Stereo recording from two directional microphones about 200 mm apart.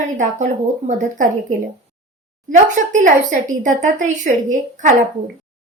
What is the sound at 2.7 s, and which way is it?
A woman's voice, 40° right (ahead or behind).